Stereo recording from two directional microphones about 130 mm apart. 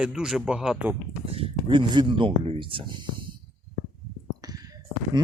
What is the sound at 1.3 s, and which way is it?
Speech, 45° right (ahead or behind).